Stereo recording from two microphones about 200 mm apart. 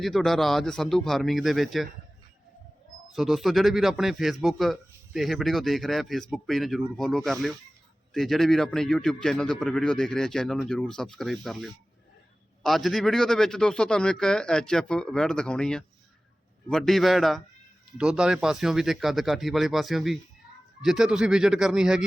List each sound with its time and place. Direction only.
0.0 s a man's voice: centre (ahead or behind)
3.1 s a man's voice: centre (ahead or behind)